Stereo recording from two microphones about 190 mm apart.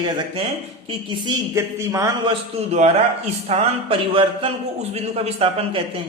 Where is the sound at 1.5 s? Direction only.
15° right (ahead or behind).